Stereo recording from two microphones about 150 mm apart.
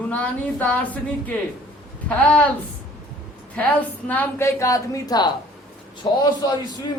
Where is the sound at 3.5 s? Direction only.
10° left (ahead or behind); by 6.2 s 30° left (ahead or behind).